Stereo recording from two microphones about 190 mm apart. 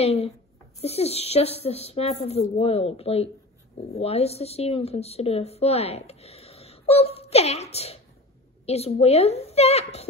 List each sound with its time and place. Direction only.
0.0 s a woman's voice: 35° left (ahead or behind)